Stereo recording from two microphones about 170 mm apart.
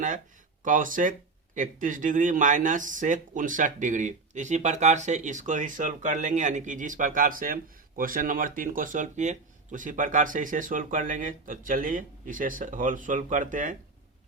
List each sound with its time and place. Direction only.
0.6 s speech: 50° right (ahead or behind)